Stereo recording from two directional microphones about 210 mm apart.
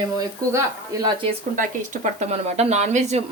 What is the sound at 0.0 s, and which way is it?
Speech, 20° right (ahead or behind).